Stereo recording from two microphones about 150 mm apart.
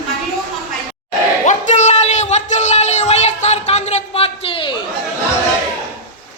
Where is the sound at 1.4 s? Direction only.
55° left (ahead or behind); by 4.7 s 35° left (ahead or behind).